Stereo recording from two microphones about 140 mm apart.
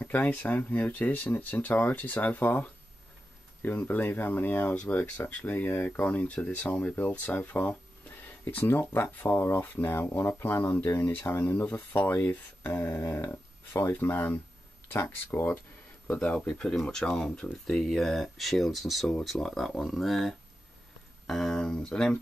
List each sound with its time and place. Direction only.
0.0 s speech: 10° left (ahead or behind)